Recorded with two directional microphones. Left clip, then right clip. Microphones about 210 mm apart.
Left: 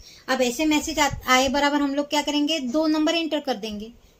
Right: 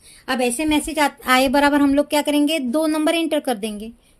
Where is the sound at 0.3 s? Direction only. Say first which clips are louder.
Right 2 dB; 50° right (ahead or behind).